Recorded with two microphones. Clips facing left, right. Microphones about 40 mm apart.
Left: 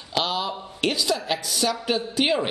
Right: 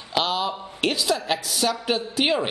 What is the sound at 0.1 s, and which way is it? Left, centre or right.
A woman's voice, centre.